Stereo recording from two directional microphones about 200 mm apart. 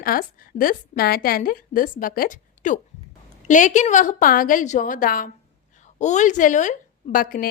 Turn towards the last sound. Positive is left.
turn(degrees=45)  # may be behind; listen again after turning